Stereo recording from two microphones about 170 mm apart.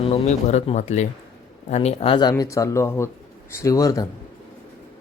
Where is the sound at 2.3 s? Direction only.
20° left (ahead or behind).